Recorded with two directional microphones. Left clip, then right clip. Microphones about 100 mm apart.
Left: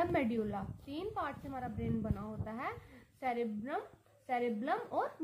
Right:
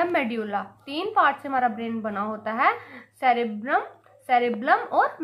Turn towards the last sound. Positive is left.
turn(degrees=15)  # may be behind; listen again after turning